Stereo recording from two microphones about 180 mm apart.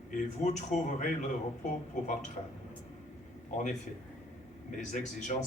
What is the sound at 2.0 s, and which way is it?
Speech, 40° left (ahead or behind).